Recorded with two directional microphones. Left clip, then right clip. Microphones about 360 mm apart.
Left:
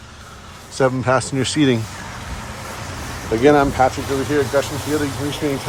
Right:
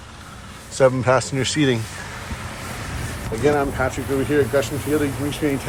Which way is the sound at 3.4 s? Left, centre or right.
Left.